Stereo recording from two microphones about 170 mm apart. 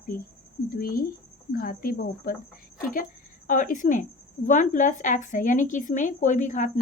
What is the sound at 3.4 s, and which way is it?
Speech, 50° left (ahead or behind).